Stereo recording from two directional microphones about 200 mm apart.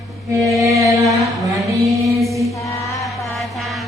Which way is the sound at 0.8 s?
15° right (ahead or behind).